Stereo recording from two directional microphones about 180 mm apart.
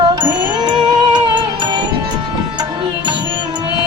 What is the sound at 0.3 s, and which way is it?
Music, 25° right (ahead or behind).